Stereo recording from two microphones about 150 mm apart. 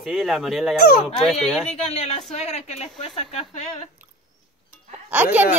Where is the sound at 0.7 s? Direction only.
90° left.